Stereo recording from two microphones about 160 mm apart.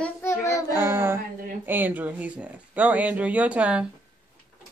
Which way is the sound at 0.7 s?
15° right (ahead or behind).